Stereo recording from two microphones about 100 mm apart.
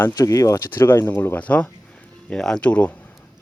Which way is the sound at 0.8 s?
25° left (ahead or behind).